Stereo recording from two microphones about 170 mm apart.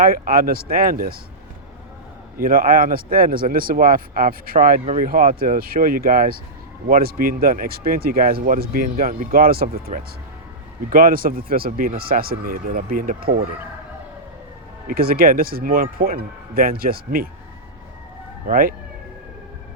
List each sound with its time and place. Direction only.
0.0 s speech: 60° right (ahead or behind)
2.4 s speech: 55° right (ahead or behind)
14.8 s speech: 60° right (ahead or behind)
18.4 s speech: 55° right (ahead or behind)